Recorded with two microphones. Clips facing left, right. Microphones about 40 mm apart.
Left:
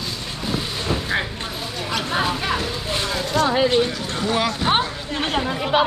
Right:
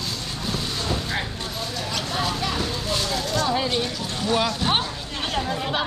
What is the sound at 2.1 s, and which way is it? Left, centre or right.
Speech, left.